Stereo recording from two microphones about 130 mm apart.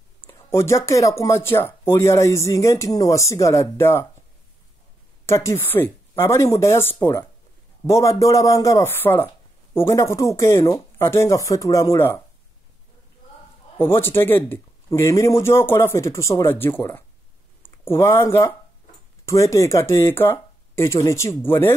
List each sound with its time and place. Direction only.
0.3 s speech: 20° left (ahead or behind)
5.2 s speech: 20° left (ahead or behind)
13.7 s speech: 15° left (ahead or behind)